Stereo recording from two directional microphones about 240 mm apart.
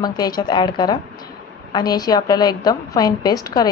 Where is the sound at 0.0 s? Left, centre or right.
Centre.